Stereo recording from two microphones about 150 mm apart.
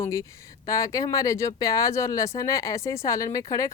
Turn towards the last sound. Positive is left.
turn(degrees=20)  # may be behind; listen again after turning